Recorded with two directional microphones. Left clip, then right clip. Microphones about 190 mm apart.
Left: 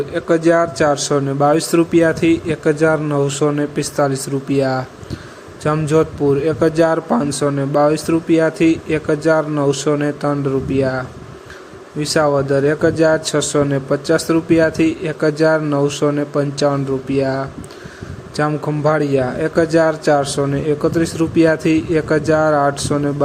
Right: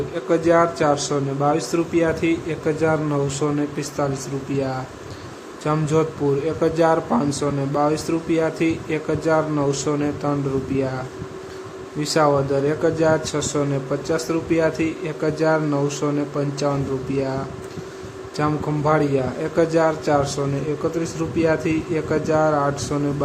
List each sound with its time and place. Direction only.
0.1 s a man's voice: 20° left (ahead or behind)